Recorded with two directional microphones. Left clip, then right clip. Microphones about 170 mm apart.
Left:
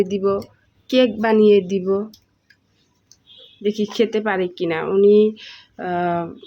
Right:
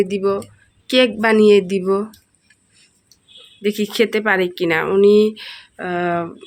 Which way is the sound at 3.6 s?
Centre (ahead or behind).